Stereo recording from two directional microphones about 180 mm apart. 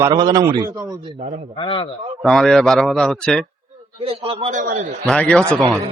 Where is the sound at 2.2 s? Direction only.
Centre (ahead or behind).